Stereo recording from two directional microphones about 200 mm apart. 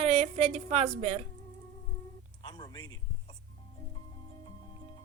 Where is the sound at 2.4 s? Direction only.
20° left (ahead or behind).